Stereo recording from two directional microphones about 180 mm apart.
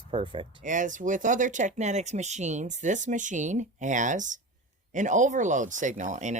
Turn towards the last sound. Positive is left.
turn(degrees=-40)  # may be behind; listen again after turning